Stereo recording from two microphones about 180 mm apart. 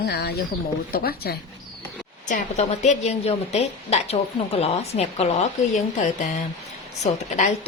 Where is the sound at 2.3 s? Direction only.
40° left (ahead or behind).